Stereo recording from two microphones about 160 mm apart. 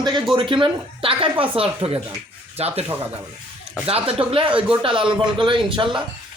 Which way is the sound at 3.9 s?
35° right (ahead or behind).